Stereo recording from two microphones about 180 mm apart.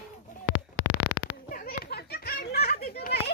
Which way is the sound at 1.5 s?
60° left (ahead or behind).